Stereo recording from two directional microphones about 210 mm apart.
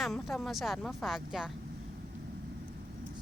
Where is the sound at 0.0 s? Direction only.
Centre (ahead or behind).